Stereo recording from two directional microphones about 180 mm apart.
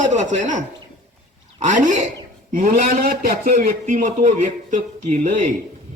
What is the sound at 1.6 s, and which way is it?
A man's voice, 45° right (ahead or behind).